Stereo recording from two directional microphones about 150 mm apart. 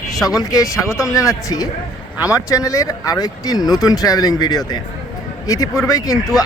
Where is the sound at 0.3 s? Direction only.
25° left (ahead or behind).